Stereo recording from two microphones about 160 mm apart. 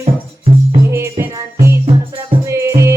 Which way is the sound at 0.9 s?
15° right (ahead or behind).